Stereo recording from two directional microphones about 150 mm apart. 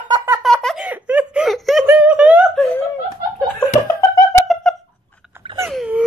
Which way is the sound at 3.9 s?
20° left (ahead or behind).